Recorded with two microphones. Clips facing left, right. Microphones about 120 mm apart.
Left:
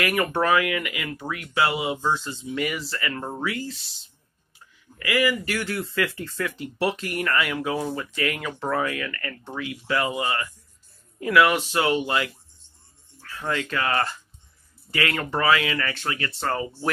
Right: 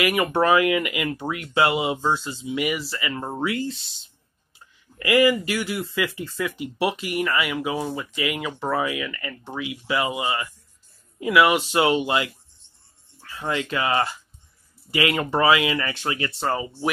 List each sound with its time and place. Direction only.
0.0 s speech: 10° right (ahead or behind)
4.9 s speech: 25° right (ahead or behind)